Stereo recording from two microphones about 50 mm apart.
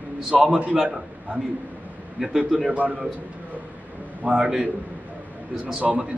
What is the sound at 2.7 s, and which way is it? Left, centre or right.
Speech, right.